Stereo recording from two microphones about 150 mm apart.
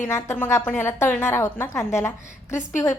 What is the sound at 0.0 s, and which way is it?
A woman's voice, 20° left (ahead or behind).